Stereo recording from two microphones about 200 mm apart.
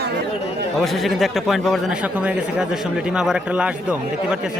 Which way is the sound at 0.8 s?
Centre (ahead or behind).